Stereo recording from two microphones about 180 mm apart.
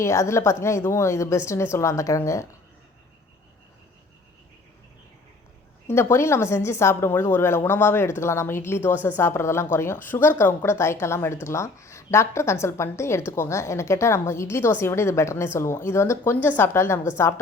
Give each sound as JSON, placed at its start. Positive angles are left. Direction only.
{"t": 0.0, "sound": "a woman's voice", "side_deg": 15}
{"t": 5.9, "sound": "a woman's voice", "side_deg": 15}